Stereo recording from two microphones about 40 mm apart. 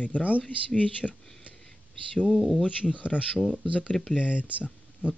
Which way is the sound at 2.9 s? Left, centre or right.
Left.